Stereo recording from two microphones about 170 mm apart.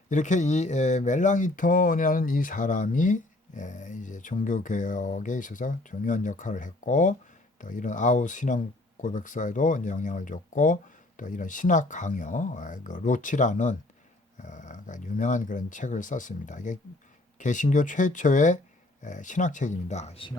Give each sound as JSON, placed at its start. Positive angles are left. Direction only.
{"t": 0.1, "sound": "speech", "side_deg": 45}